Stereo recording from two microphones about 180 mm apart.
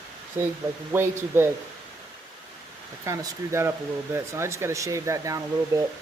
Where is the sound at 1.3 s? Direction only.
15° right (ahead or behind).